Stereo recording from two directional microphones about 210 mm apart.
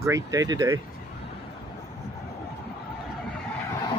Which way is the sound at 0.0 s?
15° right (ahead or behind).